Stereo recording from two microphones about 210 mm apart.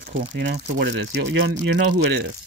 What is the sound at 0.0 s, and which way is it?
Speech, 55° right (ahead or behind).